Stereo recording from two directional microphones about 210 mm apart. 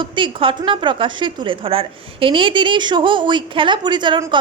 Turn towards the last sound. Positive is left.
turn(degrees=-20)  # may be behind; listen again after turning